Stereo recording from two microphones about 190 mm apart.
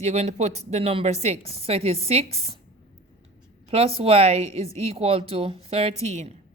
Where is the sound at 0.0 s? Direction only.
35° right (ahead or behind).